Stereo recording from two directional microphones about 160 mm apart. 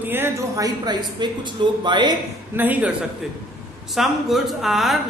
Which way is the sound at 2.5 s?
10° right (ahead or behind).